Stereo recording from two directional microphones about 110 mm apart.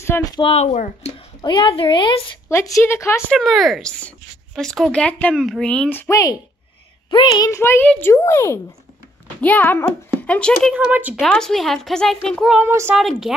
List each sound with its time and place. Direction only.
0.4 s speech: 70° left (ahead or behind)
1.4 s speech: 45° left (ahead or behind)
2.7 s speech: 25° left (ahead or behind)
3.3 s speech: centre (ahead or behind)
5.9 s speech: 20° left (ahead or behind)
7.1 s a child's voice: 40° left (ahead or behind); by 7.8 s 25° left (ahead or behind)
7.8 s a child's voice: 10° left (ahead or behind)
8.1 s a child's voice: 25° left (ahead or behind); by 10.7 s 10° left (ahead or behind)
10.7 s speech: 10° right (ahead or behind)
11.1 s speech: 5° left (ahead or behind)
12.6 s speech: 25° right (ahead or behind)
12.9 s speech: centre (ahead or behind)